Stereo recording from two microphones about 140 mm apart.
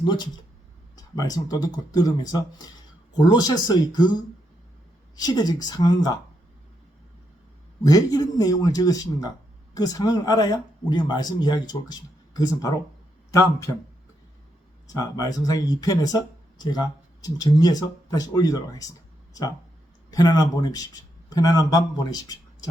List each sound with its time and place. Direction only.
0.9 s speech: 25° left (ahead or behind)
5.1 s speech: 25° left (ahead or behind)
7.9 s speech: 25° left (ahead or behind)
14.8 s speech: 25° left (ahead or behind)
20.1 s speech: 30° left (ahead or behind)